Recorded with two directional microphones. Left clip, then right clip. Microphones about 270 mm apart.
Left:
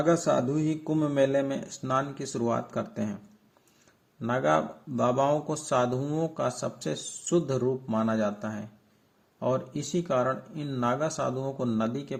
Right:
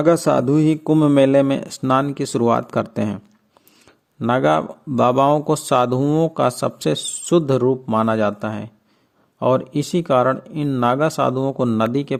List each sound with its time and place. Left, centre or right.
0.0 s speech: right
4.2 s speech: right